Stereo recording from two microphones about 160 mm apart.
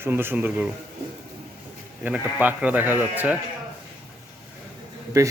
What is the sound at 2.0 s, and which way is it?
Speech, 10° right (ahead or behind).